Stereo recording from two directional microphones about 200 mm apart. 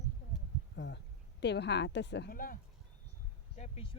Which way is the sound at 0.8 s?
65° left (ahead or behind).